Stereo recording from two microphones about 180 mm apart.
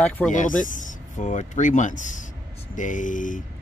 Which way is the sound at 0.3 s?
45° left (ahead or behind).